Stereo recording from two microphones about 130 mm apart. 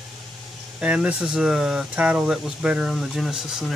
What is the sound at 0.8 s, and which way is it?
Speech, 10° right (ahead or behind).